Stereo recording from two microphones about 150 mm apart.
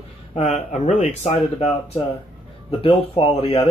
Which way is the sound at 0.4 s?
50° left (ahead or behind).